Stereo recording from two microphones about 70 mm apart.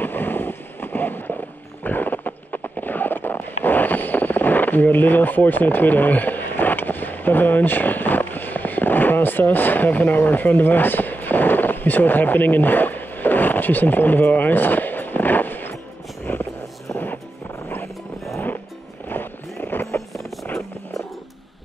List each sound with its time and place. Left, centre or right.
0.0 s a sound: left
16.3 s vehicle: left
16.9 s music: left
19.0 s music: left